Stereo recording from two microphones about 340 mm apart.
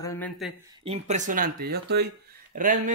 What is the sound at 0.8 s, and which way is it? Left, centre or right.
Speech, centre.